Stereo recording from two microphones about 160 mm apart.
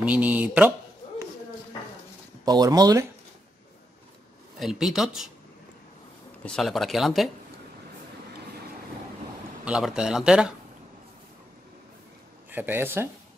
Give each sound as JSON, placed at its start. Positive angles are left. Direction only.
{"t": 0.0, "sound": "speech", "side_deg": -10}
{"t": 2.4, "sound": "speech", "side_deg": -25}
{"t": 4.6, "sound": "speech", "side_deg": 0}
{"t": 6.4, "sound": "speech", "side_deg": 0}
{"t": 9.7, "sound": "speech", "side_deg": -5}
{"t": 12.4, "sound": "speech", "side_deg": -10}